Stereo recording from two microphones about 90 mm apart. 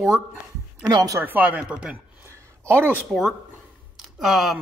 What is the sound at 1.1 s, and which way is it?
Speech, 20° right (ahead or behind).